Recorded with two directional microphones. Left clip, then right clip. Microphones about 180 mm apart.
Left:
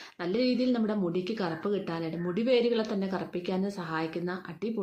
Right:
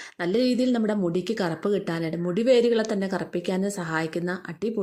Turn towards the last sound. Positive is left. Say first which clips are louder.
# right 6 dB
turn(degrees=-35)  # may be behind; listen again after turning